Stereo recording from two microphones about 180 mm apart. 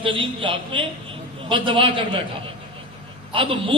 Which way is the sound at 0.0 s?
30° right (ahead or behind).